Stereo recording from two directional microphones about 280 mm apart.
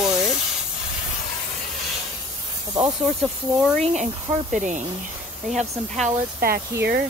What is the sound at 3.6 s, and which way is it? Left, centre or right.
Speech, centre.